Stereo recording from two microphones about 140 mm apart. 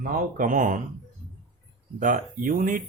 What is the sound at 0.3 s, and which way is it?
Speech, 70° right (ahead or behind).